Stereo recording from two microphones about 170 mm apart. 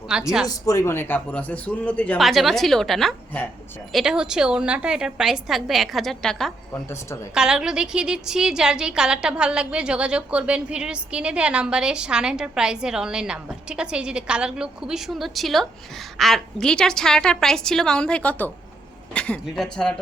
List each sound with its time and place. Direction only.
0.1 s a woman's voice: 5° right (ahead or behind)
0.4 s a man's voice: 20° left (ahead or behind); by 6.5 s centre (ahead or behind)
6.7 s a man's voice: 15° left (ahead or behind)
7.3 s a woman's voice: 5° right (ahead or behind)